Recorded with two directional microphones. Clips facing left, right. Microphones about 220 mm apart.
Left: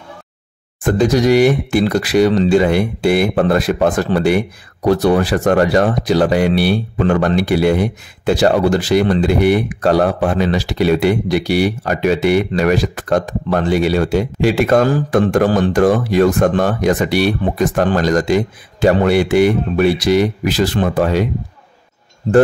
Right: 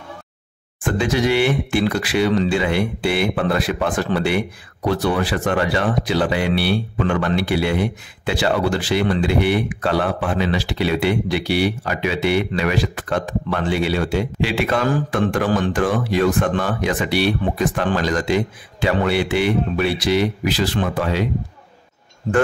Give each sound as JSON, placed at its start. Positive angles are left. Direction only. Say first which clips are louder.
{"t": 0.8, "sound": "speech", "louder": "left 6 dB", "side_deg": 40}